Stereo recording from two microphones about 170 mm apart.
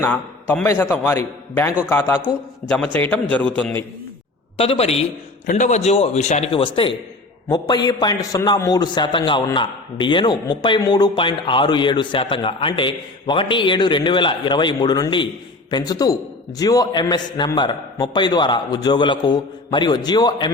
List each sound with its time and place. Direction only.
0.0 s a man's voice: 15° left (ahead or behind)
4.5 s a man's voice: 35° left (ahead or behind)